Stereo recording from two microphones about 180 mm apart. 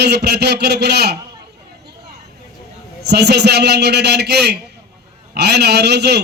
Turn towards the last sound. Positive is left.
turn(degrees=-65)  # may be behind; listen again after turning